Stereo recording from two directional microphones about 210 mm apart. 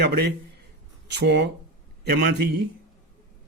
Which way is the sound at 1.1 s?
55° right (ahead or behind).